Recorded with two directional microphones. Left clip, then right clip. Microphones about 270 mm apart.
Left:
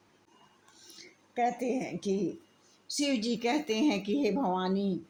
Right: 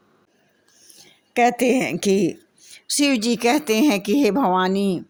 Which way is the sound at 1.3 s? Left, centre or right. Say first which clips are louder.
Right 13 dB; right.